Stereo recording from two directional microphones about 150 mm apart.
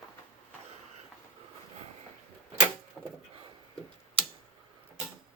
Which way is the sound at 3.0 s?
5° right (ahead or behind).